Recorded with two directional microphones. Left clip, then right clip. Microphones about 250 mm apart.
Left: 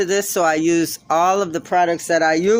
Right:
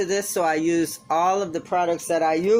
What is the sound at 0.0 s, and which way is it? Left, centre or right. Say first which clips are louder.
Speech: left 5 dB; left.